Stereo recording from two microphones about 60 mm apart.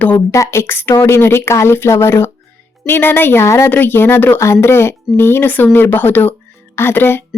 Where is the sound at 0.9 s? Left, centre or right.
Left.